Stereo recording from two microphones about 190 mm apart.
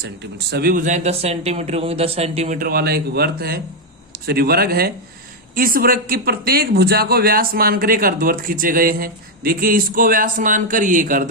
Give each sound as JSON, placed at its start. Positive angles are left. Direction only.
{"t": 0.0, "sound": "speech", "side_deg": -60}